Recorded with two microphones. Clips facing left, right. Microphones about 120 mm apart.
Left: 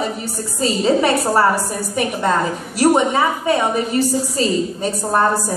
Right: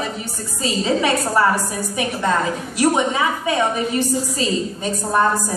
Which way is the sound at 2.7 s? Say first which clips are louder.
Left 4 dB; 40° left (ahead or behind).